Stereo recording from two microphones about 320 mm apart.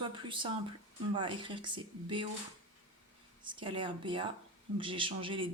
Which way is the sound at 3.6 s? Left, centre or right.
Centre.